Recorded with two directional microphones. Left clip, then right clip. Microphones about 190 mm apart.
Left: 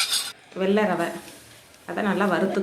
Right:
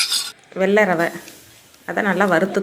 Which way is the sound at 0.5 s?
40° right (ahead or behind).